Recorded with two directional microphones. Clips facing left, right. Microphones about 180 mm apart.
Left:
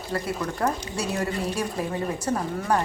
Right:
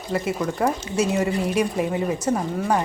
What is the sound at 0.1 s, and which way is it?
A woman's voice, 15° right (ahead or behind).